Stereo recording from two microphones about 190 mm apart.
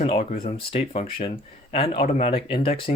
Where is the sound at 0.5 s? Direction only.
30° left (ahead or behind).